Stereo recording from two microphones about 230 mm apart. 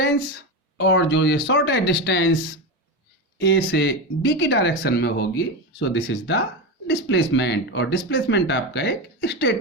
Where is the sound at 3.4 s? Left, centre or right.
Left.